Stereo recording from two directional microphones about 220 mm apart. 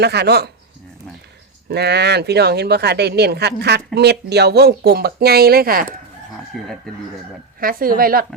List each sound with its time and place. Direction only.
0.0 s speech: 50° right (ahead or behind)
1.7 s speech: 50° right (ahead or behind)
6.5 s speech: centre (ahead or behind)
7.6 s a woman's voice: 40° right (ahead or behind)